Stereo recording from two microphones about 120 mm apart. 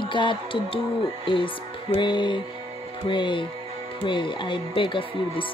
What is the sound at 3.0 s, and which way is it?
Speech, 45° left (ahead or behind).